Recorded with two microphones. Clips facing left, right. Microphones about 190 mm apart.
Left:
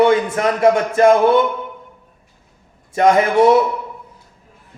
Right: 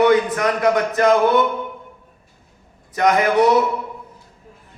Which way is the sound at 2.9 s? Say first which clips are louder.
Left 3 dB; 25° left (ahead or behind).